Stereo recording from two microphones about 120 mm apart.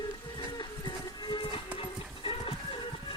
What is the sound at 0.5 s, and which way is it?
Music, 40° left (ahead or behind).